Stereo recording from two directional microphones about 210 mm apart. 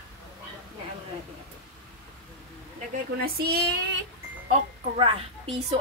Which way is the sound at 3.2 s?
50° right (ahead or behind).